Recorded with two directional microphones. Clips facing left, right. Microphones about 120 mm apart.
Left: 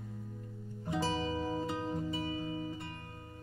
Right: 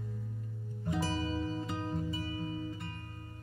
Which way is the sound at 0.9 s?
25° left (ahead or behind).